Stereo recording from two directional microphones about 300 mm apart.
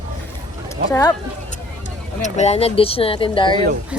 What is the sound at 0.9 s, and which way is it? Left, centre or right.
Speech, centre.